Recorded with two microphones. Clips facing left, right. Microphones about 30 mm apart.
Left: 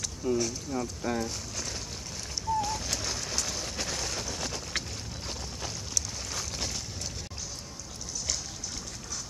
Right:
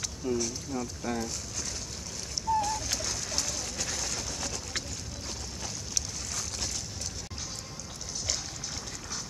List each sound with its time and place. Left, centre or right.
0.2 s speech: centre
2.5 s bird: centre
3.0 s a sound: centre
3.4 s vehicle: centre
6.3 s boat: centre